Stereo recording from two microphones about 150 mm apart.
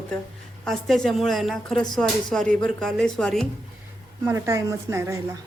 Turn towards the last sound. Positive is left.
turn(degrees=-20)  # may be behind; listen again after turning